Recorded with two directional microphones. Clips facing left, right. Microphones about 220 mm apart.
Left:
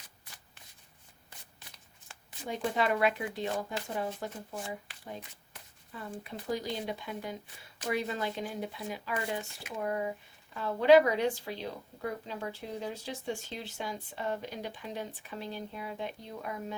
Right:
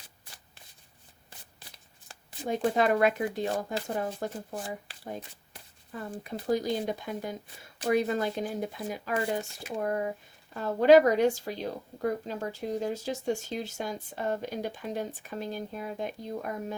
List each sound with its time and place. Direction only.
2.0 s a woman's voice: 40° right (ahead or behind)